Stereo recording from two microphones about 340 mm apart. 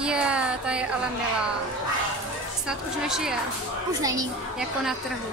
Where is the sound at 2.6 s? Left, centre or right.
Centre.